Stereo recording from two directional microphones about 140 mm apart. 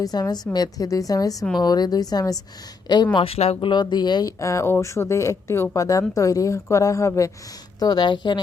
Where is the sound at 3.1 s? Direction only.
40° left (ahead or behind).